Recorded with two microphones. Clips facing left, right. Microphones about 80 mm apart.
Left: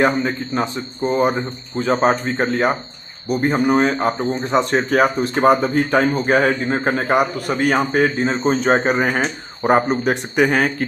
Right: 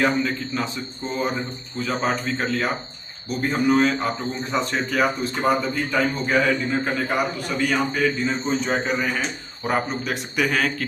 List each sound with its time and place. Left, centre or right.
0.0 s speech: left
1.1 s speech: left
1.8 s speech: left
4.7 s speech: left